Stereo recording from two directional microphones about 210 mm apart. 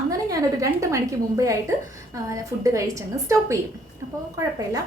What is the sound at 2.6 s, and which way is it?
A woman's voice, 15° right (ahead or behind).